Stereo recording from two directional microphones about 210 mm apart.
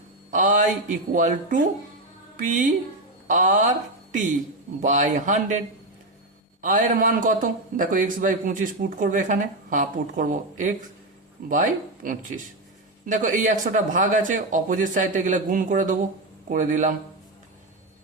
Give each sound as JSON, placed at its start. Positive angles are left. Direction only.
{"t": 0.3, "sound": "a sound", "side_deg": -40}
{"t": 1.1, "sound": "a man's voice", "side_deg": -40}
{"t": 4.8, "sound": "a man's voice", "side_deg": -35}